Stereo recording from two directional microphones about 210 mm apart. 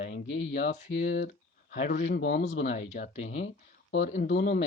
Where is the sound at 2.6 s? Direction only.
35° left (ahead or behind).